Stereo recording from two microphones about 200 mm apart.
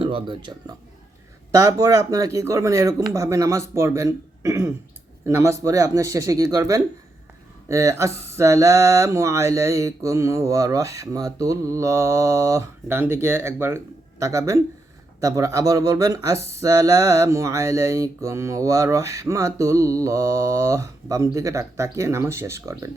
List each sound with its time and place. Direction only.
0.0 s speech: 25° right (ahead or behind)
1.5 s mantra: 15° right (ahead or behind)
3.8 s speech: 15° right (ahead or behind)
5.2 s mantra: 15° right (ahead or behind)